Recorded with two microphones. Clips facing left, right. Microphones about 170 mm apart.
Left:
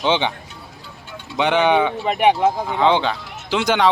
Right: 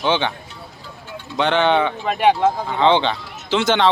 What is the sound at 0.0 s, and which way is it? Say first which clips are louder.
Speech: even; 15° left (ahead or behind).